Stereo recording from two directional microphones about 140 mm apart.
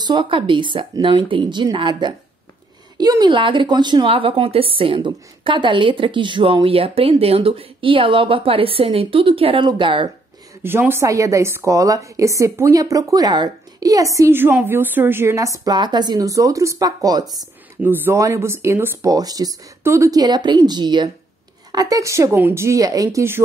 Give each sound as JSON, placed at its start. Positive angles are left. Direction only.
{"t": 0.0, "sound": "a woman's voice", "side_deg": -35}
{"t": 10.6, "sound": "a woman's voice", "side_deg": -15}
{"t": 17.8, "sound": "a woman's voice", "side_deg": -15}